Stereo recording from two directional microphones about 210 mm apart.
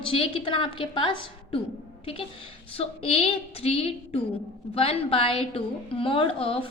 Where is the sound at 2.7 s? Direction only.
25° left (ahead or behind).